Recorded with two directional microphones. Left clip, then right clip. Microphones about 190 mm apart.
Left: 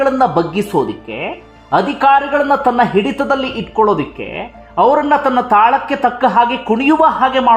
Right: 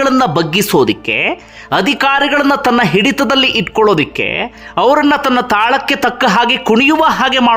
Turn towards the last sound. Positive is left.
turn(degrees=-25)  # may be behind; listen again after turning